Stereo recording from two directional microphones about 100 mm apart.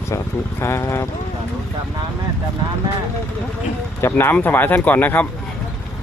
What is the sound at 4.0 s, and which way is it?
Speech, 25° left (ahead or behind).